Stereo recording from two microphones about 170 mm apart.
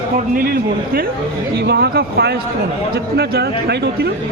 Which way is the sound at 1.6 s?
75° right (ahead or behind).